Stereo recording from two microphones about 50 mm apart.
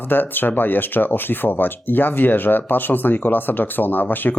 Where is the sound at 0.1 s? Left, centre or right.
Left.